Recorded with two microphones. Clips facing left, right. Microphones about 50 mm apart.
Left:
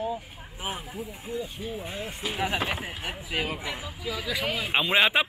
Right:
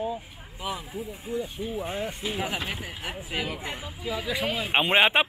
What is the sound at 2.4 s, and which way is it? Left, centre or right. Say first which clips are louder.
Speech: left 6 dB; left.